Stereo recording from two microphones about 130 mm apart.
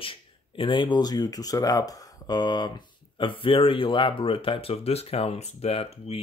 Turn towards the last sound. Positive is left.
turn(degrees=50)  # may be behind; listen again after turning